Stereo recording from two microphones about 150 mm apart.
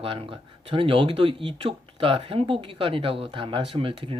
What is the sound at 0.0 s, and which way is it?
Speech, 40° right (ahead or behind).